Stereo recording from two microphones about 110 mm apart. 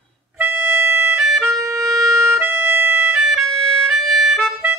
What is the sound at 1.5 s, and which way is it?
Music, 30° right (ahead or behind).